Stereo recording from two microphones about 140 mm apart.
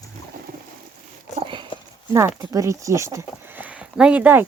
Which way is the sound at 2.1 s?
25° right (ahead or behind).